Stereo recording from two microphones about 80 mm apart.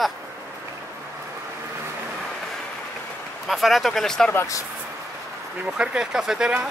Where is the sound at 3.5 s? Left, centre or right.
Centre.